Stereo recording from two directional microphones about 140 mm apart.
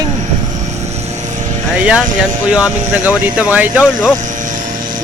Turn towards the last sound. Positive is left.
turn(degrees=-10)  # may be behind; listen again after turning